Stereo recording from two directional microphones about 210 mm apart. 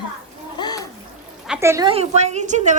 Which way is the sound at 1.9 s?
30° right (ahead or behind).